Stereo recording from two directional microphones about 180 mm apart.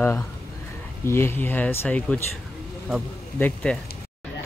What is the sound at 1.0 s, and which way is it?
A man's voice, 15° left (ahead or behind).